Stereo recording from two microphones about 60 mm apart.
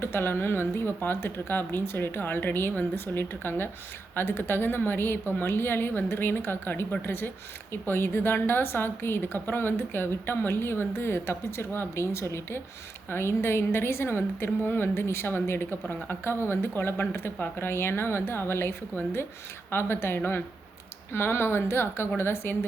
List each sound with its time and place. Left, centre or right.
0.0 s a woman's voice: left